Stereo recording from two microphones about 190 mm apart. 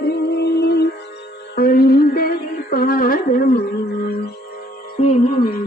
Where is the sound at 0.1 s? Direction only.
60° left (ahead or behind).